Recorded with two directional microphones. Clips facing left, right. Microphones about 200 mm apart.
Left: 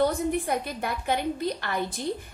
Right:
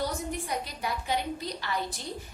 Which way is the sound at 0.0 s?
55° left (ahead or behind).